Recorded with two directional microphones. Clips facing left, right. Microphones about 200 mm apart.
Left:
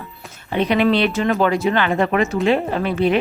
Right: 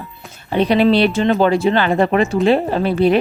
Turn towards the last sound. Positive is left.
turn(degrees=-35)  # may be behind; listen again after turning